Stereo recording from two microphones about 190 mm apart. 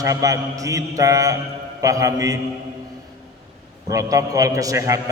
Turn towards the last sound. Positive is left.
turn(degrees=-15)  # may be behind; listen again after turning